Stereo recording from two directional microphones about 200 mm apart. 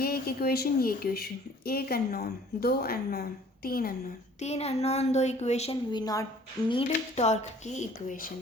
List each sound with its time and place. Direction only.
0.0 s a woman's voice: 50° left (ahead or behind)
4.4 s a woman's voice: 30° left (ahead or behind)
6.7 s a woman's voice: 30° left (ahead or behind)